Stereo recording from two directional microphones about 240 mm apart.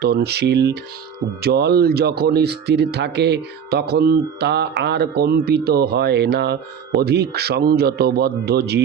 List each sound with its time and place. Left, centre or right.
0.0 s speech: right